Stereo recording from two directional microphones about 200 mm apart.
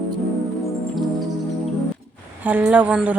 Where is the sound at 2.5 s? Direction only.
10° right (ahead or behind).